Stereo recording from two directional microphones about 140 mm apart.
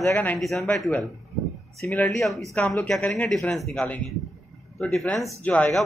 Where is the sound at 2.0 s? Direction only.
Centre (ahead or behind).